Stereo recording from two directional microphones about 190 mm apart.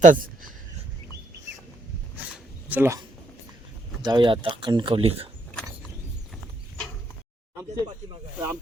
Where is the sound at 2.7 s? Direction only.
15° right (ahead or behind); by 5.2 s 30° right (ahead or behind).